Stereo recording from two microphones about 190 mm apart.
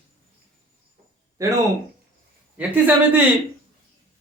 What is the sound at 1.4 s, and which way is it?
Speech, 15° right (ahead or behind).